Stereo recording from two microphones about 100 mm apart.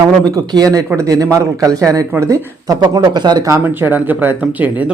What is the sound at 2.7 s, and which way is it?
Speech, 50° right (ahead or behind).